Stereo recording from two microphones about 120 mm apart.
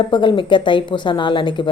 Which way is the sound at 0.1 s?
40° left (ahead or behind).